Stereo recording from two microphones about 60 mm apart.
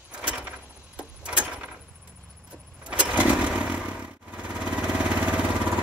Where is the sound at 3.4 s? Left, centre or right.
Centre.